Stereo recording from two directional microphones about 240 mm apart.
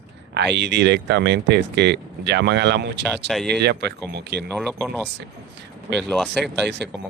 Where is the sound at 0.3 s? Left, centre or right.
Right.